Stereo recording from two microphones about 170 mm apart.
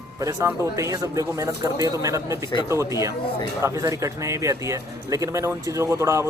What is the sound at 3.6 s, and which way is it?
Speech, 20° right (ahead or behind).